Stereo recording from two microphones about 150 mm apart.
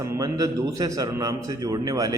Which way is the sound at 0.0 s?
20° right (ahead or behind).